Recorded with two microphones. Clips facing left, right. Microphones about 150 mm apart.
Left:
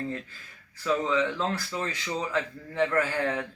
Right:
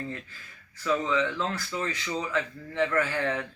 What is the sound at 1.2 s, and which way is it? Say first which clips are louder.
A man's voice: left 1 dB; 35° left (ahead or behind).